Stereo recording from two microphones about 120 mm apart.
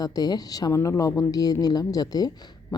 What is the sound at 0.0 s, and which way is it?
A woman's voice, 35° left (ahead or behind).